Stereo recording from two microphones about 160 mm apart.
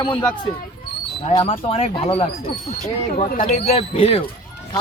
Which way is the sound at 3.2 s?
60° left (ahead or behind).